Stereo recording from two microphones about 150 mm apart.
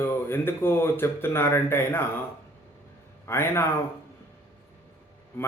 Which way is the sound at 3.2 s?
15° left (ahead or behind).